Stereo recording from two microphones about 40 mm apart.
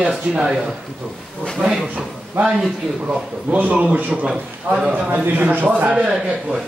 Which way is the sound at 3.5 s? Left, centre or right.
Right.